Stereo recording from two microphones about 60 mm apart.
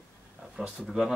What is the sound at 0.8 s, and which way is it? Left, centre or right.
Speech, centre.